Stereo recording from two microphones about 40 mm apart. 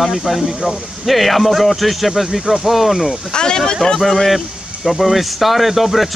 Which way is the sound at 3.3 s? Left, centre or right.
Centre.